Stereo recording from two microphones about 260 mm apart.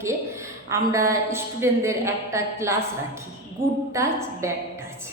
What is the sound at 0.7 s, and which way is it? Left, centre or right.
A woman's voice, centre.